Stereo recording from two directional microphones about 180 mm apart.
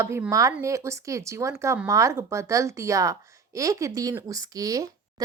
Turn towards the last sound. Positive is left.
turn(degrees=-20)  # may be behind; listen again after turning